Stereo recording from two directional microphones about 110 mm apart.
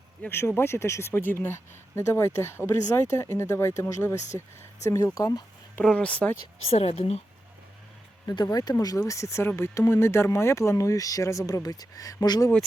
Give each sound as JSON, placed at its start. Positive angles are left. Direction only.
{"t": 0.3, "sound": "speech", "side_deg": 20}
{"t": 5.8, "sound": "speech", "side_deg": 10}
{"t": 6.7, "sound": "a woman's voice", "side_deg": 65}
{"t": 8.3, "sound": "speech", "side_deg": 35}